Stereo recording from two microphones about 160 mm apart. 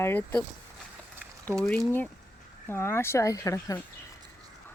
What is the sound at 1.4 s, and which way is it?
Speech, 5° left (ahead or behind).